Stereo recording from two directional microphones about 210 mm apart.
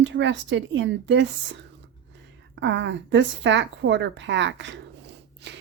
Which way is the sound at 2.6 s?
60° right (ahead or behind).